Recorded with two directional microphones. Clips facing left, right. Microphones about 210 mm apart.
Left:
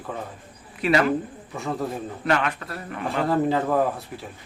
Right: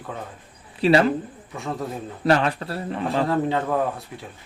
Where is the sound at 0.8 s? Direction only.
30° right (ahead or behind).